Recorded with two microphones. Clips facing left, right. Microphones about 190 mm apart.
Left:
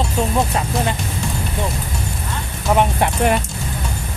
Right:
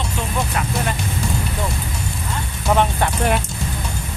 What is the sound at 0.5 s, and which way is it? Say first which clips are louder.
Speech: left 2 dB; 25° left (ahead or behind).